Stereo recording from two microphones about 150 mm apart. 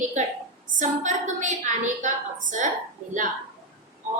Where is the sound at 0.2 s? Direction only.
55° right (ahead or behind).